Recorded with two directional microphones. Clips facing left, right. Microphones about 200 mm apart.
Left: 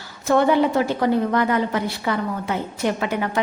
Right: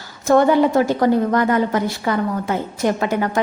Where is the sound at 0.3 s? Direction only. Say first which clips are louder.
Right 3 dB; 45° right (ahead or behind).